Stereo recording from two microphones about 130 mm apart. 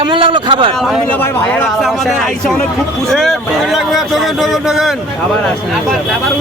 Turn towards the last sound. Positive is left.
turn(degrees=-5)  # may be behind; listen again after turning